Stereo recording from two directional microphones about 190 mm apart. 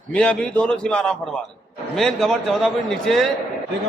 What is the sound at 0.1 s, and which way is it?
A man's voice, 5° left (ahead or behind).